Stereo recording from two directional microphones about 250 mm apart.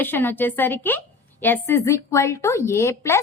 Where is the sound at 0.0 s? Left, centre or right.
Centre.